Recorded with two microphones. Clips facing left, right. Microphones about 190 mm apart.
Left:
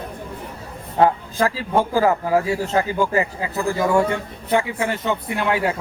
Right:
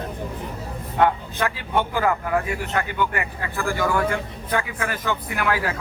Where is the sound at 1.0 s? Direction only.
30° left (ahead or behind).